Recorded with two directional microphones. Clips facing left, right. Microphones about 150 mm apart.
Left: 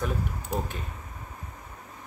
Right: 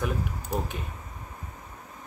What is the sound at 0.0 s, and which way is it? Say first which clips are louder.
Speech: even; 5° right (ahead or behind).